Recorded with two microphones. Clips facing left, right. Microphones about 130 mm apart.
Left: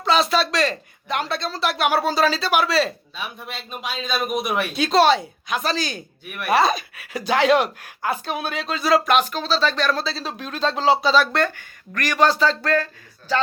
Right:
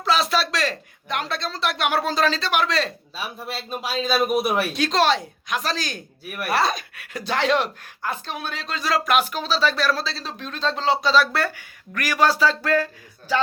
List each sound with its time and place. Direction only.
0.0 s speech: centre (ahead or behind)
3.2 s speech: 35° right (ahead or behind)
4.0 s speech: centre (ahead or behind)
9.2 s speech: 10° right (ahead or behind)